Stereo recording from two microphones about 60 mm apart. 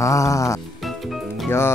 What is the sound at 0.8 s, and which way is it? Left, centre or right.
Music, centre.